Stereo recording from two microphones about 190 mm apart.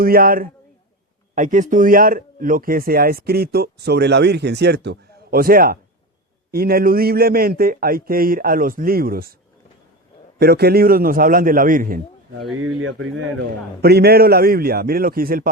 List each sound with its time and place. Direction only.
0.0 s speech: 50° right (ahead or behind)
10.3 s speech: 55° right (ahead or behind)
12.5 s speech: 90° right
13.8 s speech: 55° right (ahead or behind)